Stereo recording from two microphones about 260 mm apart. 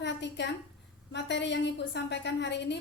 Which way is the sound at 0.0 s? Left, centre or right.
Left.